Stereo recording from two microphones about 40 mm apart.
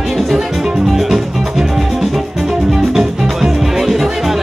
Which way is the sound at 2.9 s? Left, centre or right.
Centre.